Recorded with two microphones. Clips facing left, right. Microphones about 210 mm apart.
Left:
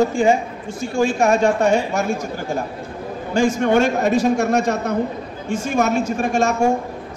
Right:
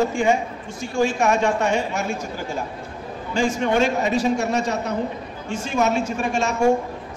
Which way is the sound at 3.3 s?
50° left (ahead or behind).